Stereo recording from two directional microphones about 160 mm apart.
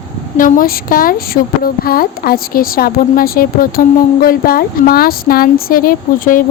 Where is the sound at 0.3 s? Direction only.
60° left (ahead or behind).